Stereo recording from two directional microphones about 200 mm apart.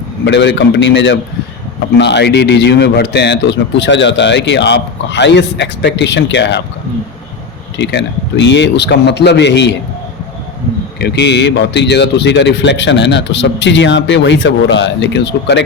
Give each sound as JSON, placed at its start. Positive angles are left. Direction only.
{"t": 0.3, "sound": "a man's voice", "side_deg": 60}
{"t": 7.8, "sound": "a man's voice", "side_deg": 60}
{"t": 11.0, "sound": "a man's voice", "side_deg": 60}